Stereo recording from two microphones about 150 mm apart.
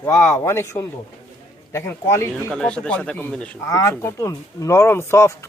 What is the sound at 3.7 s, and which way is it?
Speech, 20° left (ahead or behind).